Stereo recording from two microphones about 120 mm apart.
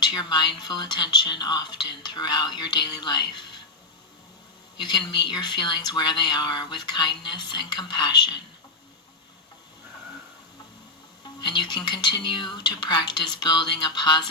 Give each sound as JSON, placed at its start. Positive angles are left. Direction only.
{"t": 0.0, "sound": "speech", "side_deg": 40}
{"t": 4.8, "sound": "speech", "side_deg": 35}
{"t": 11.3, "sound": "speech", "side_deg": 40}